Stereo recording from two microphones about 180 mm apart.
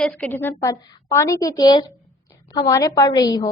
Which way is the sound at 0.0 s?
10° left (ahead or behind).